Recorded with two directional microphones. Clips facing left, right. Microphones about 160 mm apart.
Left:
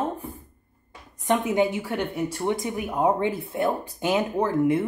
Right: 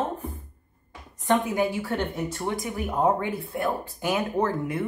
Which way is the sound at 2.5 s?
25° left (ahead or behind).